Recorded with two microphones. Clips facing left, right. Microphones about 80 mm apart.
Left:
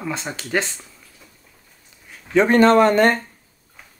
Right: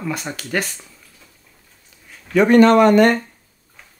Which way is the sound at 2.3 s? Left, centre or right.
Left.